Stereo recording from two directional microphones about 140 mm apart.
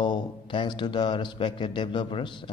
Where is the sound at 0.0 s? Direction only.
35° left (ahead or behind).